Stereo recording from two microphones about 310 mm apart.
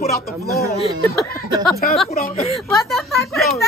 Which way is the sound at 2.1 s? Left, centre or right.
Left.